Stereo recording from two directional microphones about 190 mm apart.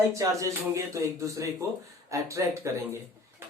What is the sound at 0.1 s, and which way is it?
Speech, 15° right (ahead or behind).